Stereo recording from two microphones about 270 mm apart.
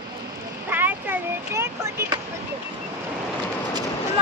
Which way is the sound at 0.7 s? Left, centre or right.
Centre.